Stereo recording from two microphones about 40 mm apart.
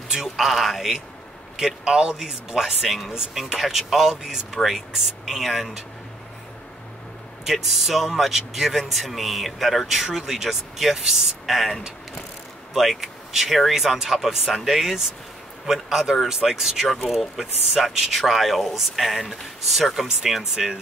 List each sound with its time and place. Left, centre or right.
0.1 s speech: centre
1.9 s speech: centre
7.5 s speech: centre